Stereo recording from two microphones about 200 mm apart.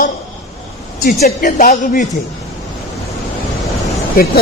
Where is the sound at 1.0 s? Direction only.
45° left (ahead or behind).